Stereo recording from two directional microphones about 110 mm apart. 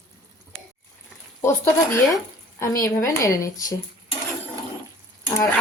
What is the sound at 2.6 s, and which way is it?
A woman's voice, 30° left (ahead or behind).